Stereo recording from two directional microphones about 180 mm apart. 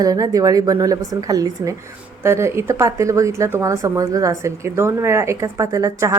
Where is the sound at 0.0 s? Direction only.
20° right (ahead or behind).